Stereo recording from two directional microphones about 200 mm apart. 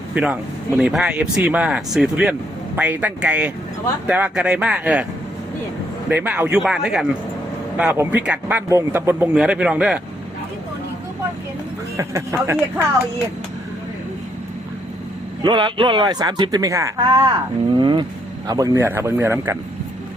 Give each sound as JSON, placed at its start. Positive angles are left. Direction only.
{"t": 0.1, "sound": "speech", "side_deg": -5}
{"t": 6.1, "sound": "speech", "side_deg": -10}
{"t": 11.9, "sound": "speech", "side_deg": -15}
{"t": 15.4, "sound": "speech", "side_deg": -25}